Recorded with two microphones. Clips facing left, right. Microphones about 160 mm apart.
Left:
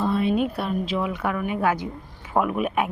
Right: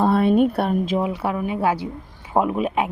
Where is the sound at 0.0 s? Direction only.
55° right (ahead or behind).